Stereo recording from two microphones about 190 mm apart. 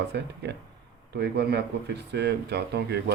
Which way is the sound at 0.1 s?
60° right (ahead or behind).